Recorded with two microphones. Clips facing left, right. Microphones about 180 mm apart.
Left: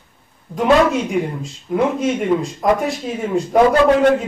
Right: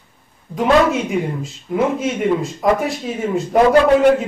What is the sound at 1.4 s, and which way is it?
A man's voice, centre (ahead or behind).